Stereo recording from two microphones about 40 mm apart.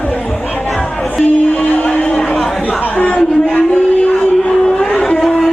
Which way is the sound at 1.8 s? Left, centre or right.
Left.